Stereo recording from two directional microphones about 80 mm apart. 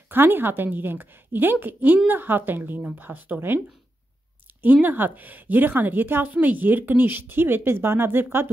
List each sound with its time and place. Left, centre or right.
0.1 s a woman's voice: right
4.8 s a woman's voice: right